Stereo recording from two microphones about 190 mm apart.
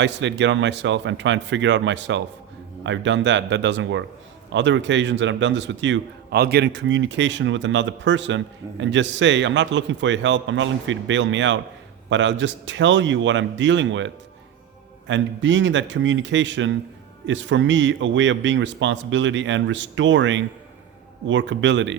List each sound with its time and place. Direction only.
0.0 s a man's voice: 70° right (ahead or behind)